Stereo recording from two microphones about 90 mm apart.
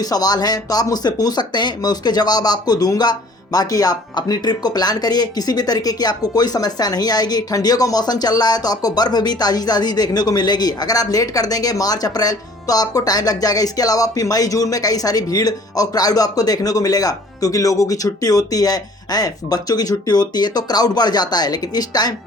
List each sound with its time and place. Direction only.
0.0 s speech: 45° left (ahead or behind)